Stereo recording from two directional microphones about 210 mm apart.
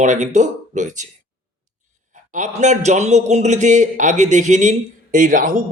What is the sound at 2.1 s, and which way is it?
A man's voice, 35° right (ahead or behind).